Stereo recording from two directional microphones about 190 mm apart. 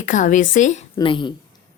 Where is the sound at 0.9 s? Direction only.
25° left (ahead or behind).